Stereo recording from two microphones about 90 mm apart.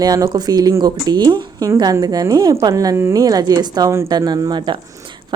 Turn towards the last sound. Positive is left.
turn(degrees=-60)  # may be behind; listen again after turning